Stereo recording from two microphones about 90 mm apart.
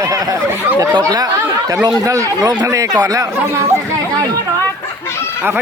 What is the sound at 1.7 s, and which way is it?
Speech, 40° right (ahead or behind).